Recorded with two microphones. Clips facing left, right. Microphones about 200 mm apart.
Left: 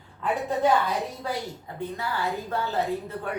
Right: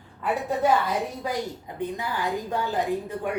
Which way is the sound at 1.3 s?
15° right (ahead or behind).